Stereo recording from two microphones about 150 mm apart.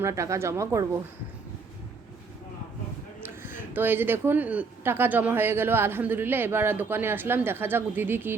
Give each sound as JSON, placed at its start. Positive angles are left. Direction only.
{"t": 0.0, "sound": "speech", "side_deg": -20}
{"t": 3.7, "sound": "speech", "side_deg": -15}